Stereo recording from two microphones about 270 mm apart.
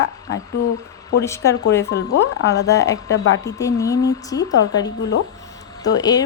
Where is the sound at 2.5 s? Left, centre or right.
Centre.